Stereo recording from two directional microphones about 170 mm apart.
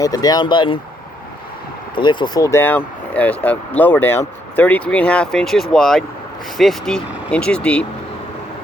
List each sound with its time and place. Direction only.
0.0 s speech: 20° left (ahead or behind)
2.0 s speech: 25° left (ahead or behind); by 7.9 s 5° left (ahead or behind)